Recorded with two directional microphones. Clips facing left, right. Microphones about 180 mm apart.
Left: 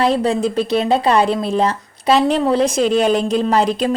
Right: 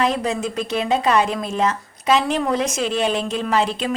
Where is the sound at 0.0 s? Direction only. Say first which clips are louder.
Left 5 dB; 35° left (ahead or behind).